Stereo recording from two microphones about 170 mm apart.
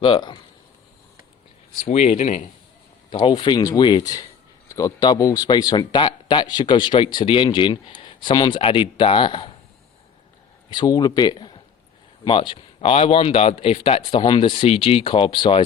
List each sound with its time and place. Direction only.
0.0 s a man's voice: 30° left (ahead or behind)
1.8 s speech: 40° left (ahead or behind)
3.1 s a man's voice: 30° left (ahead or behind)
10.7 s speech: 25° left (ahead or behind)